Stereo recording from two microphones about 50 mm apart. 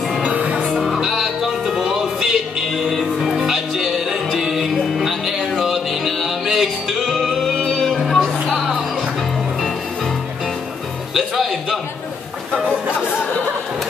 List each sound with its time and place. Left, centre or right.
0.2 s music: right
0.7 s music: centre
2.7 s music: centre
11.1 s music: centre